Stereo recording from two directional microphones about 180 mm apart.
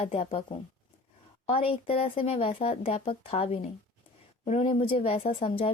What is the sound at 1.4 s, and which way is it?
Speech, 30° left (ahead or behind).